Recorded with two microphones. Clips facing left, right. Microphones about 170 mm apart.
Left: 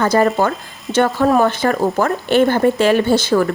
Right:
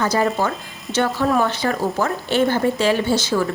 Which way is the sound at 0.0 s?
55° left (ahead or behind).